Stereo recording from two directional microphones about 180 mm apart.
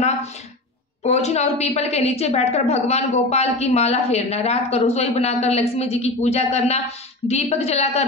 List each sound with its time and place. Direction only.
1.0 s a woman's voice: 35° left (ahead or behind)